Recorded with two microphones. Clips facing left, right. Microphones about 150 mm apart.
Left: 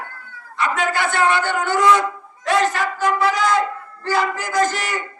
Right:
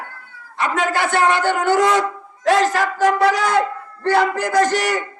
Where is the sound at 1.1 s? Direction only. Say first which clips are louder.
Right 3 dB; 80° right.